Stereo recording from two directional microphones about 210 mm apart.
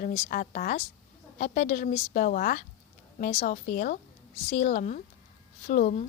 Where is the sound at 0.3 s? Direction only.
40° left (ahead or behind).